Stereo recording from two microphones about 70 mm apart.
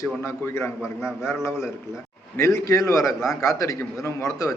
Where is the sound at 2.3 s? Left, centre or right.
Left.